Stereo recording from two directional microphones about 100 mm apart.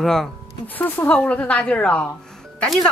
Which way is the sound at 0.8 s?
15° left (ahead or behind).